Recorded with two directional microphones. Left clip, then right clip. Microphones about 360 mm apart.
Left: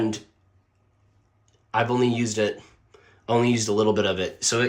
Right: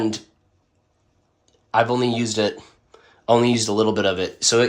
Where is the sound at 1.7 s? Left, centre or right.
Centre.